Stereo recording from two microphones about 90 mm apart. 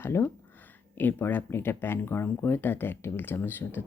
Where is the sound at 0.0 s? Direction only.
25° left (ahead or behind).